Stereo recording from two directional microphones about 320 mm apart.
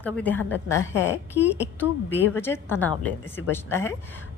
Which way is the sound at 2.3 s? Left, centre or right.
Centre.